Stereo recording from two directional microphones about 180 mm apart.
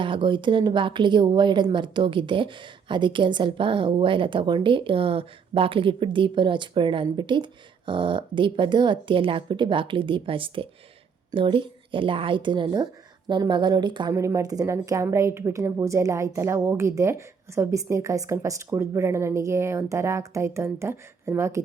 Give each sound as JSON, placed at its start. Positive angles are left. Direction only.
{"t": 0.0, "sound": "a woman's voice", "side_deg": -30}